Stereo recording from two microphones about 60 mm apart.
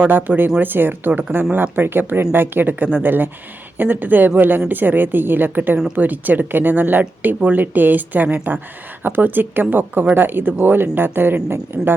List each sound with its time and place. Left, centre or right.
0.0 s a woman's voice: right